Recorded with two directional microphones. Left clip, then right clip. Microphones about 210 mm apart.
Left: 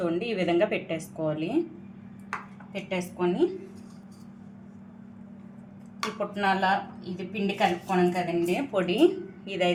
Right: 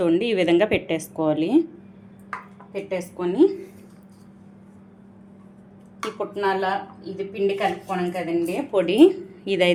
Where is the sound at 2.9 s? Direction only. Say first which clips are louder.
Right 6 dB; 35° right (ahead or behind).